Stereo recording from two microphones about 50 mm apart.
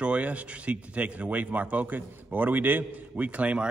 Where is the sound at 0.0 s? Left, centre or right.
Right.